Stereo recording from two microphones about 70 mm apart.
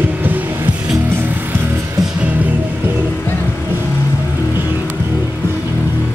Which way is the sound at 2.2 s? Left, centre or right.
Right.